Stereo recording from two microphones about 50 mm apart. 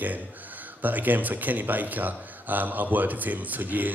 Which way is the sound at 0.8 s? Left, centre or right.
Right.